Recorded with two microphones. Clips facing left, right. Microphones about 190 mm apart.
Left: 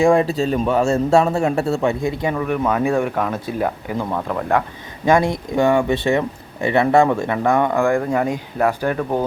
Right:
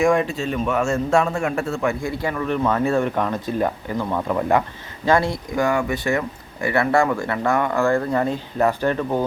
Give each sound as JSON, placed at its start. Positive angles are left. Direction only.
{"t": 0.0, "sound": "a man's voice", "side_deg": 30}
{"t": 4.3, "sound": "speech", "side_deg": -5}
{"t": 5.0, "sound": "a man's voice", "side_deg": 15}